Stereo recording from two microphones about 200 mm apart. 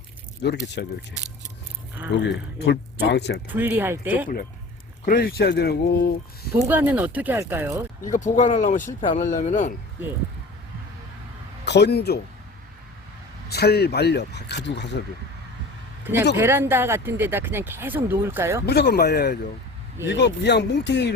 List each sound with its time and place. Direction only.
0.4 s speech: 60° left (ahead or behind)
2.2 s speech: 55° left (ahead or behind)
3.5 s speech: 10° right (ahead or behind)
5.0 s speech: 50° left (ahead or behind)
6.6 s speech: 10° right (ahead or behind)
8.0 s speech: 40° left (ahead or behind)
11.6 s speech: 55° left (ahead or behind)
13.5 s speech: 55° left (ahead or behind)
16.4 s speech: 10° right (ahead or behind)
18.6 s speech: 55° left (ahead or behind)